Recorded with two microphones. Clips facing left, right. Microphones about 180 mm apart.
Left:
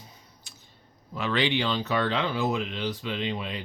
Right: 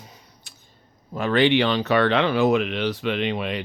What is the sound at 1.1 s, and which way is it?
Speech, 50° right (ahead or behind).